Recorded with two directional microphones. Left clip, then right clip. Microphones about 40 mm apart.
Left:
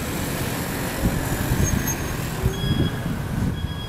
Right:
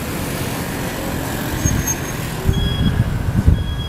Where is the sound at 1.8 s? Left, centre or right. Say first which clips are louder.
Right 4 dB; right.